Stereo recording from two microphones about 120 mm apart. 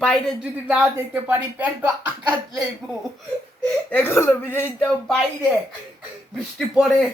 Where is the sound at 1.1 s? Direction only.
15° right (ahead or behind).